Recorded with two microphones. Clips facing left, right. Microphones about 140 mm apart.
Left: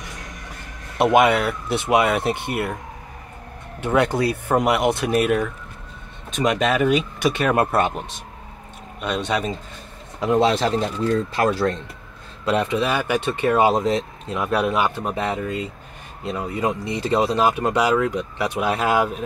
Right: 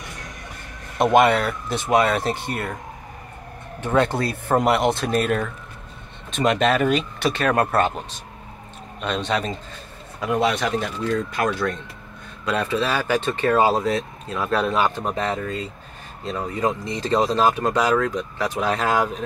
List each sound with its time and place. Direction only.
0.9 s speech: 10° left (ahead or behind)
3.8 s speech: 10° left (ahead or behind)
9.0 s speech: 10° left (ahead or behind)
10.2 s speech: 25° left (ahead or behind)